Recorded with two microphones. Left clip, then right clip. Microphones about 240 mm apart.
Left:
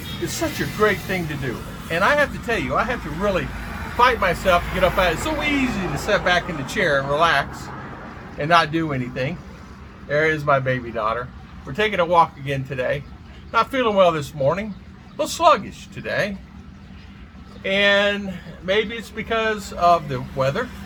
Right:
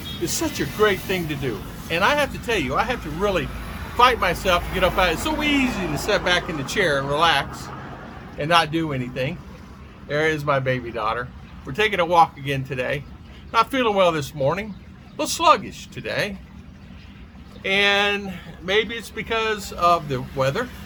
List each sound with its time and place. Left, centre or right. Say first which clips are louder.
0.3 s speech: left 1 dB; centre
1.9 s speech: left 2 dB; centre
8.4 s speech: left 2 dB; centre
17.6 s speech: left 1 dB; centre